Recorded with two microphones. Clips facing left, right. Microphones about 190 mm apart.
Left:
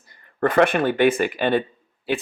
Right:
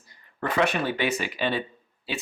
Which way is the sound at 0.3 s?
55° left (ahead or behind).